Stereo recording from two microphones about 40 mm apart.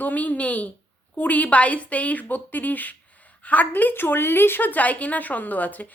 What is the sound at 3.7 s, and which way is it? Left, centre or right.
A woman's voice, left.